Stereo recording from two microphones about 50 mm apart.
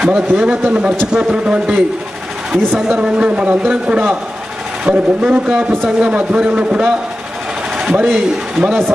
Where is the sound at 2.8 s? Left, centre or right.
Centre.